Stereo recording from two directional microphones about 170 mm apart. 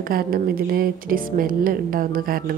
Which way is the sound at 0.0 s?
60° right (ahead or behind).